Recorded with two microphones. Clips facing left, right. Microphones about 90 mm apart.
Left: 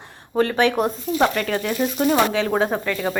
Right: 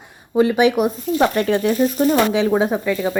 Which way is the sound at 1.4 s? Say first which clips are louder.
Right 6 dB; 25° right (ahead or behind).